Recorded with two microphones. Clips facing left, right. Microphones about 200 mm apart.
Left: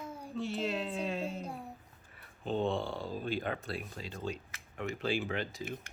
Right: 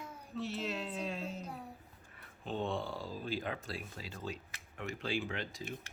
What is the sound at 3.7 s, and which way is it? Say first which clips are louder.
Speech: left 4 dB; centre (ahead or behind).